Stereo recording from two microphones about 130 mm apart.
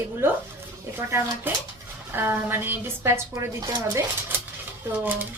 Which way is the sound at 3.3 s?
30° right (ahead or behind).